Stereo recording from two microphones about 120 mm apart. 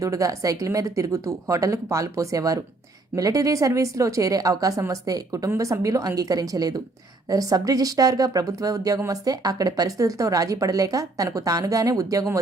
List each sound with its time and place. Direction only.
0.0 s speech: 25° right (ahead or behind)